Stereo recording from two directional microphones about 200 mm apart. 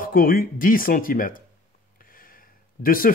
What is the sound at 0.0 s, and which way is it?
Speech, 45° left (ahead or behind).